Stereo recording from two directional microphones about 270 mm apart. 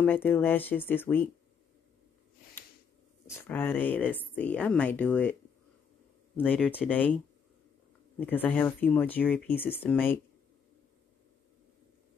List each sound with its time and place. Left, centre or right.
0.0 s a woman's voice: centre
3.3 s a woman's voice: centre
6.3 s speech: centre
8.2 s a woman's voice: centre